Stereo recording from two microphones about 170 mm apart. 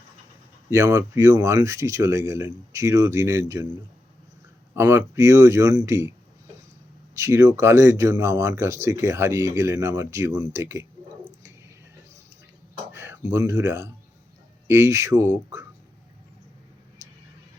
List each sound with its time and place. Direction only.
0.7 s speech: 15° right (ahead or behind)
4.7 s speech: 15° right (ahead or behind)
7.2 s speech: 20° right (ahead or behind)
12.9 s a sound: 15° right (ahead or behind)
13.3 s speech: 15° right (ahead or behind)